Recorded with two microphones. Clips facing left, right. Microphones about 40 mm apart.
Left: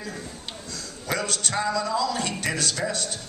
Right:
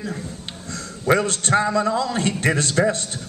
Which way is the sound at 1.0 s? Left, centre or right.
Right.